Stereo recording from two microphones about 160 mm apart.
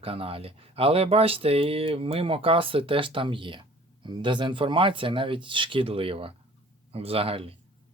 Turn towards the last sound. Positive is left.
turn(degrees=-35)  # may be behind; listen again after turning